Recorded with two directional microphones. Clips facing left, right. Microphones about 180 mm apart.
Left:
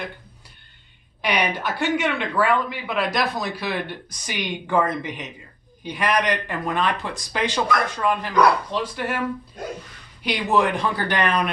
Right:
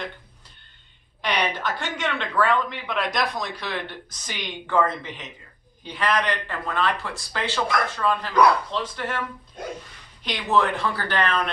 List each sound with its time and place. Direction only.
1.2 s speech: 10° left (ahead or behind)
10.2 s speech: 10° left (ahead or behind)